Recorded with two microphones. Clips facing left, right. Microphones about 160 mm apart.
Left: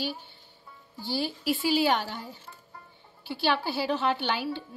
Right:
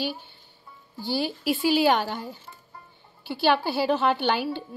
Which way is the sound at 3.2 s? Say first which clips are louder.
Right 5 dB; 55° right (ahead or behind).